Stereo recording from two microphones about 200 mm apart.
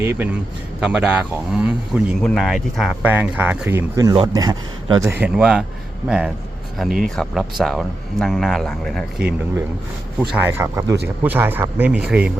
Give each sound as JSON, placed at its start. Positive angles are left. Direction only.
{"t": 0.0, "sound": "speech", "side_deg": -10}
{"t": 5.0, "sound": "speech", "side_deg": -10}